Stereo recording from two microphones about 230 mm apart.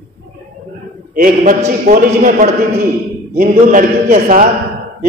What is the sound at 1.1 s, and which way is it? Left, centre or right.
Mantra, right.